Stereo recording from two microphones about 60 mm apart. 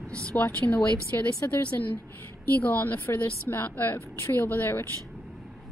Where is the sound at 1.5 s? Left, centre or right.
Left.